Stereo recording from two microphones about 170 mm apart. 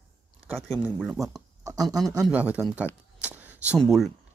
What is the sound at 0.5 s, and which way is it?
Speech, centre (ahead or behind).